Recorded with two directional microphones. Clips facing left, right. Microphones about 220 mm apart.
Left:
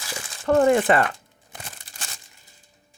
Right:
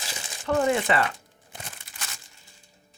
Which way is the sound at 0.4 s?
50° left (ahead or behind).